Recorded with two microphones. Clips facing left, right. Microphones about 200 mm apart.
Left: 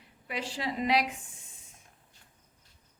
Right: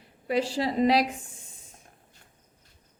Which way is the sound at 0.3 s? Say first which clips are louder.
Right 9 dB; 35° right (ahead or behind).